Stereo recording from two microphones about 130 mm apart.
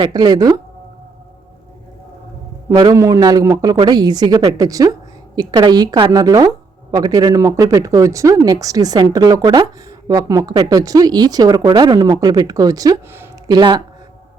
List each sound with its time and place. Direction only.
0.0 s a woman's voice: 30° right (ahead or behind)
2.6 s a woman's voice: 25° right (ahead or behind)